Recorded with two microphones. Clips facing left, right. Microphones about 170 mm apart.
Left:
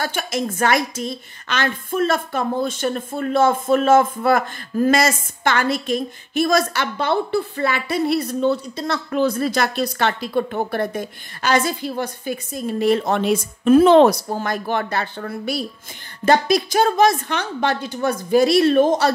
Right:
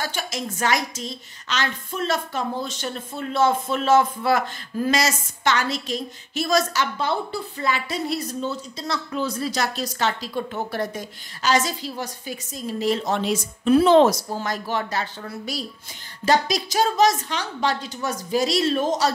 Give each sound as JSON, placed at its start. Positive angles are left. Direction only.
{"t": 0.0, "sound": "a woman's voice", "side_deg": 55}